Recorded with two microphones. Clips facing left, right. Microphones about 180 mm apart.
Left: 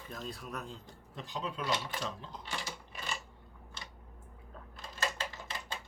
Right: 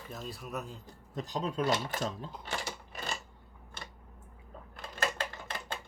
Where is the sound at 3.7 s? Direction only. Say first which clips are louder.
Right 3 dB; 50° right (ahead or behind).